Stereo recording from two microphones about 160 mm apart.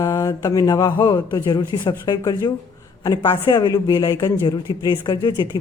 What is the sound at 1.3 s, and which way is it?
Speech, 15° left (ahead or behind).